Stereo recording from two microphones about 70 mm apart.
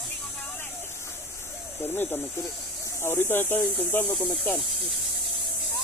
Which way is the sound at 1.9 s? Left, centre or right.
Left.